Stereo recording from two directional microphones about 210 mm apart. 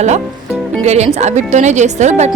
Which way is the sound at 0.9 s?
30° right (ahead or behind).